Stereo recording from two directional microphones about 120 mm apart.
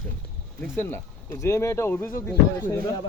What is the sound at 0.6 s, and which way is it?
Speech, 15° left (ahead or behind).